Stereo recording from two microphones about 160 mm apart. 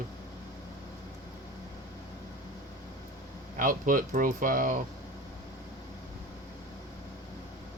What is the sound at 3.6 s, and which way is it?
Speech, 55° right (ahead or behind).